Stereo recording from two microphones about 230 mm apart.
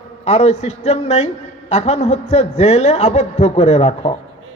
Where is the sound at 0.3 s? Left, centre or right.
Left.